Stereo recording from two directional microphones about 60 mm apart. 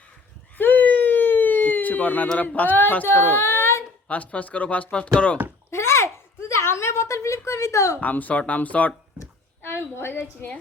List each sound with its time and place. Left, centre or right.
0.5 s a sound: left
2.6 s speech: left
4.1 s speech: left
5.7 s a sound: left
6.5 s a woman's voice: left
8.0 s speech: left
10.2 s speech: left